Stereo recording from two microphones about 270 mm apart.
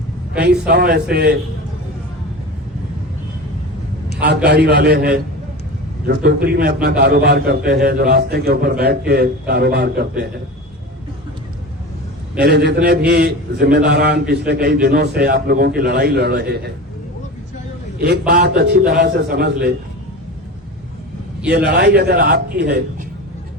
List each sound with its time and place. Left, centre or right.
0.3 s a man's voice: right
4.4 s a man's voice: right
12.4 s a man's voice: right
18.0 s a man's voice: right
21.4 s a man's voice: right